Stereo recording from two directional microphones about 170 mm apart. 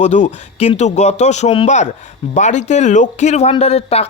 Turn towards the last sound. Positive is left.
turn(degrees=40)  # may be behind; listen again after turning